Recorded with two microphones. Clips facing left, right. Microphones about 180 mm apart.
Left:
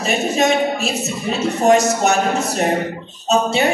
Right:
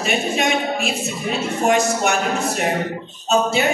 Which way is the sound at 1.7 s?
40° left (ahead or behind).